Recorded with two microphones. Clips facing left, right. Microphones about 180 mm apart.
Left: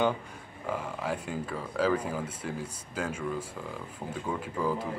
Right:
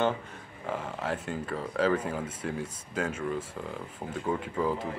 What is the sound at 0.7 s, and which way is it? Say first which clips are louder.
Speech: right 1 dB; 10° left (ahead or behind).